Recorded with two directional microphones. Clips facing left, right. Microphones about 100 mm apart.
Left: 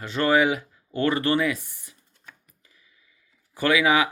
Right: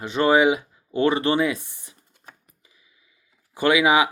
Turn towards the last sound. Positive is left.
turn(degrees=-20)  # may be behind; listen again after turning